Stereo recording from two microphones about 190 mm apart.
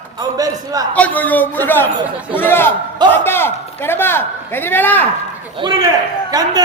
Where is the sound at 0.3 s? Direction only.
20° right (ahead or behind).